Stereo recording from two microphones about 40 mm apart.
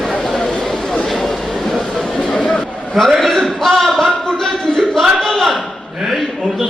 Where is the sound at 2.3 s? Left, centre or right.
Left.